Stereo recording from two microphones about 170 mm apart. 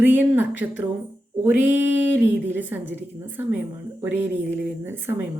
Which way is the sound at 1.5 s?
10° right (ahead or behind).